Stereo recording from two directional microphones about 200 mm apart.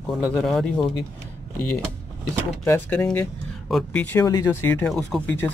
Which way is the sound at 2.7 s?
5° left (ahead or behind).